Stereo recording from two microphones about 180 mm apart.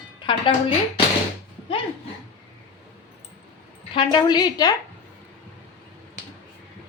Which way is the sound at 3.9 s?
25° left (ahead or behind).